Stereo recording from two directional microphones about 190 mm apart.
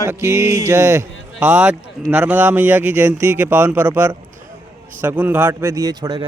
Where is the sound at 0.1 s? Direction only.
15° right (ahead or behind).